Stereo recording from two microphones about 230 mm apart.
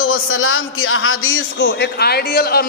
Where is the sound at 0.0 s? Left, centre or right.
Left.